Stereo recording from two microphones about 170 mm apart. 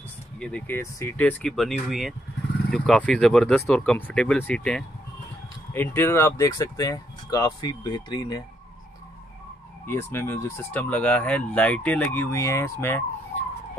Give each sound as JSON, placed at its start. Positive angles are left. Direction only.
{"t": 0.4, "sound": "speech", "side_deg": 5}
{"t": 9.8, "sound": "speech", "side_deg": 15}